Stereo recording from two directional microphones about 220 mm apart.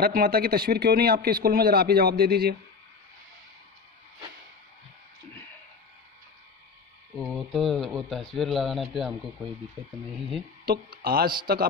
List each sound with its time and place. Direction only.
0.0 s speech: 45° right (ahead or behind)
7.2 s speech: centre (ahead or behind)
10.6 s speech: 45° right (ahead or behind)